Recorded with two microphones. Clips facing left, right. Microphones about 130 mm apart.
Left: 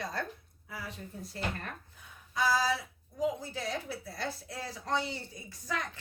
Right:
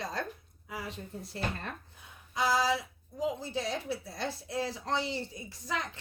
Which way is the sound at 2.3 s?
20° right (ahead or behind).